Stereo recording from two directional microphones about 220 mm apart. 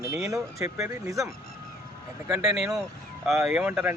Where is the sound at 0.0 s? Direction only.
15° right (ahead or behind).